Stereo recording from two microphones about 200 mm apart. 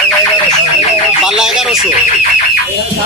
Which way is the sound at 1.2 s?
5° right (ahead or behind).